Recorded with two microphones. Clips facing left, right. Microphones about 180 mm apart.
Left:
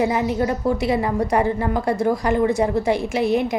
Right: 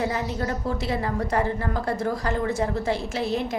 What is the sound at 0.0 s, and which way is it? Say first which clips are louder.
A woman's voice: left 7 dB; 15° left (ahead or behind).